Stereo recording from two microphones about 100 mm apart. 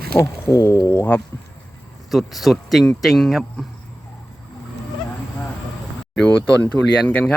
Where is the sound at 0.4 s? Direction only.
30° left (ahead or behind).